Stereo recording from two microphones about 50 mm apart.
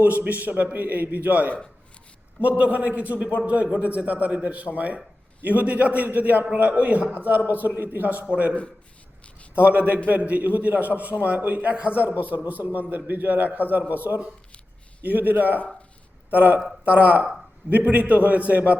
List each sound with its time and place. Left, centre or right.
0.0 s a man's voice: right
9.6 s a man's voice: right